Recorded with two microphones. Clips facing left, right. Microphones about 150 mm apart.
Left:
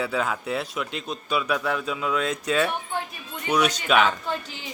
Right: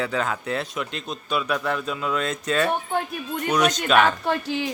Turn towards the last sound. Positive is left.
turn(degrees=-80)